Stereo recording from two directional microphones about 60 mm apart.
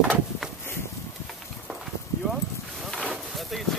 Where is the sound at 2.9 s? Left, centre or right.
Centre.